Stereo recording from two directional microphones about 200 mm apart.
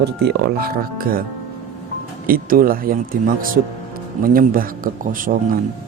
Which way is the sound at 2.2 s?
45° right (ahead or behind).